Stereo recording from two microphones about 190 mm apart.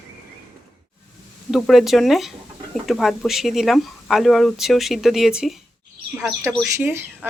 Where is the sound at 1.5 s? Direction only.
Centre (ahead or behind).